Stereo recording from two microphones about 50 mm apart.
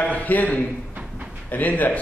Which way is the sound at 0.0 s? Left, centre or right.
Left.